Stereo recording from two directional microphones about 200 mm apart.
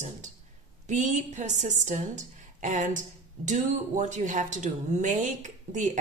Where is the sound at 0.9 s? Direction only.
35° right (ahead or behind).